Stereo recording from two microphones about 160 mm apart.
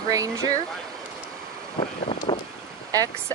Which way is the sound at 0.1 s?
20° right (ahead or behind).